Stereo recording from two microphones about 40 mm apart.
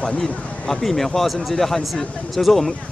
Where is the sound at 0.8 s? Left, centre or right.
Centre.